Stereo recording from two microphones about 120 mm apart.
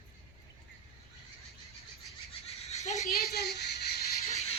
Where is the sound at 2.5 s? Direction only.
65° left (ahead or behind).